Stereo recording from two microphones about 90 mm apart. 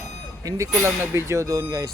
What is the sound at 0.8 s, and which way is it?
Speech, 30° right (ahead or behind).